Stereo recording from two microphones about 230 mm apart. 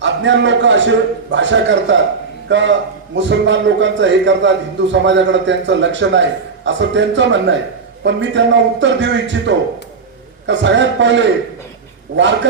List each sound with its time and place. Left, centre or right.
0.0 s a man's voice: right